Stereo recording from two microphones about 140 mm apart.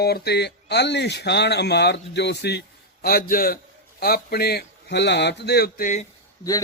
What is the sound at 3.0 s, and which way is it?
A man's voice, 90° left.